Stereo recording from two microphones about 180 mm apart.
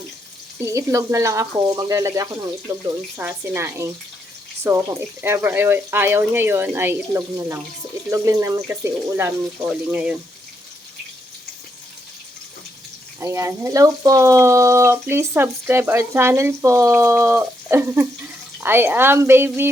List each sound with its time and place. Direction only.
0.6 s speech: 15° right (ahead or behind)
13.1 s speech: 15° right (ahead or behind)